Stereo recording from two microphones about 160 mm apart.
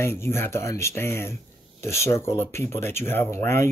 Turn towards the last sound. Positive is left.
turn(degrees=15)  # may be behind; listen again after turning